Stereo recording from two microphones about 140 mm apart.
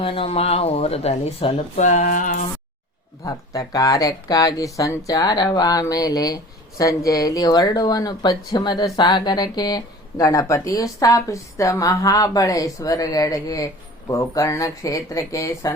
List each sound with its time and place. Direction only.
0.0 s speech: 40° left (ahead or behind); by 2.5 s 70° left (ahead or behind)
3.2 s speech: 25° left (ahead or behind)